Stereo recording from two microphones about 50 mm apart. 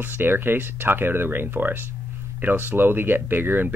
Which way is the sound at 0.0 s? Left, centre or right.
Right.